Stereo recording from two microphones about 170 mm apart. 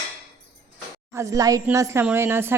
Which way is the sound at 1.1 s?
15° right (ahead or behind).